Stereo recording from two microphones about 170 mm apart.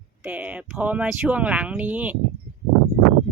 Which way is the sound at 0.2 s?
10° right (ahead or behind).